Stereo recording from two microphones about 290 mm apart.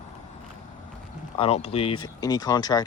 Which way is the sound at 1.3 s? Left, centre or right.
Left.